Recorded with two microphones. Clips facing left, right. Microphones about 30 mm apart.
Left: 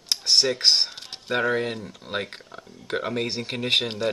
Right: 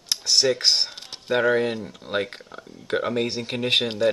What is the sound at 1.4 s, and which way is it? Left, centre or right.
Speech, centre.